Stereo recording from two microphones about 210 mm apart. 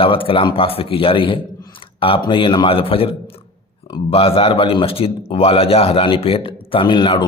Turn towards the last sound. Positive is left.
turn(degrees=20)  # may be behind; listen again after turning